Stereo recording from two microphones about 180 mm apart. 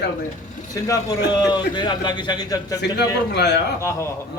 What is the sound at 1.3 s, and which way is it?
A man's voice, 25° left (ahead or behind).